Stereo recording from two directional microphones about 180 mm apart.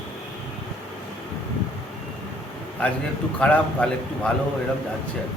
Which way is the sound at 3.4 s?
5° left (ahead or behind).